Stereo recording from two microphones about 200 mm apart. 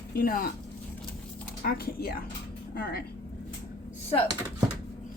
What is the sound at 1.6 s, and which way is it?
Speech, 50° left (ahead or behind).